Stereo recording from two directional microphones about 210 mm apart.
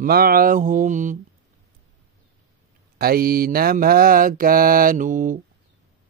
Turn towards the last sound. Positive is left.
turn(degrees=-40)  # may be behind; listen again after turning